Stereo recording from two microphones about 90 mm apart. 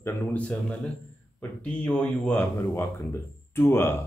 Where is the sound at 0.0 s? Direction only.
25° left (ahead or behind).